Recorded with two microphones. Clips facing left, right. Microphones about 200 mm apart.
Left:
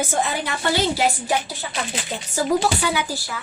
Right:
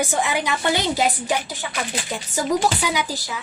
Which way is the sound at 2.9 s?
15° right (ahead or behind).